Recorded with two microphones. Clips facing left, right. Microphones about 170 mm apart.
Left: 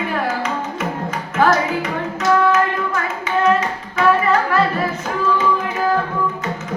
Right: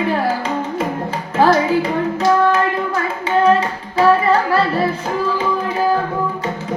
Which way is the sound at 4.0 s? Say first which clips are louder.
Right 3 dB; 30° right (ahead or behind).